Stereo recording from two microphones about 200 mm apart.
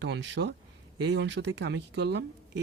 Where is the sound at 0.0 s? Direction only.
60° right (ahead or behind).